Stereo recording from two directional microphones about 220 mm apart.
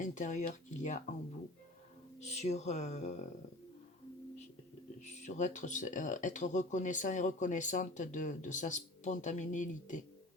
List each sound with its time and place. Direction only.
0.0 s speech: 35° left (ahead or behind)
2.2 s speech: 30° left (ahead or behind)
5.0 s speech: 30° left (ahead or behind)